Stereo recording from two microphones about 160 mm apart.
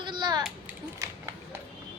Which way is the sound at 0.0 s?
30° right (ahead or behind).